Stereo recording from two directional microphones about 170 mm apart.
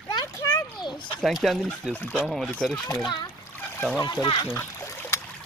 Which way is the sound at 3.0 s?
25° left (ahead or behind).